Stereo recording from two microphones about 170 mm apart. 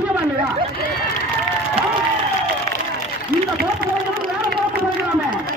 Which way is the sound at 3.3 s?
60° right (ahead or behind).